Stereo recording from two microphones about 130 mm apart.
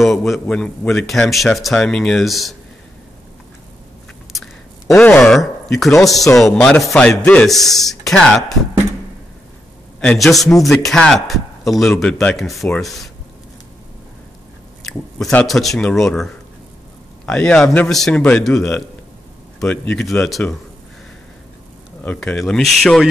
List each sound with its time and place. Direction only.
0.0 s a man's voice: centre (ahead or behind)
4.3 s a sound: centre (ahead or behind)
5.0 s a man's voice: 5° left (ahead or behind)
9.9 s a man's voice: 5° left (ahead or behind)
14.9 s a man's voice: 5° left (ahead or behind)
17.3 s a man's voice: 5° left (ahead or behind)
22.0 s a man's voice: 10° left (ahead or behind)